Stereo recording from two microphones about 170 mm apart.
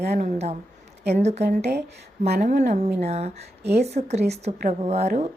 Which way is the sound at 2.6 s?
40° right (ahead or behind).